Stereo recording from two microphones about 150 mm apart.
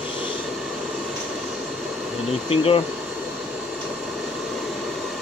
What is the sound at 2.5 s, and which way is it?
Speech, 40° left (ahead or behind).